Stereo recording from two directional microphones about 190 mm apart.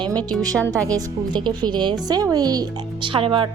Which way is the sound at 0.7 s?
15° right (ahead or behind).